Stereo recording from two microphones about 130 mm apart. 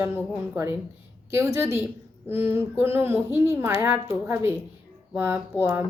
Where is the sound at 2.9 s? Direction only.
15° right (ahead or behind).